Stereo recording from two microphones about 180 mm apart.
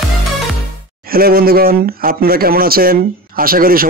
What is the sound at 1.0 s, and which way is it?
Speech, 55° right (ahead or behind).